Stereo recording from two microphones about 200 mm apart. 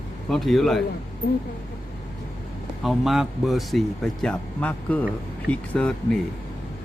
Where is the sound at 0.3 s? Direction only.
Centre (ahead or behind).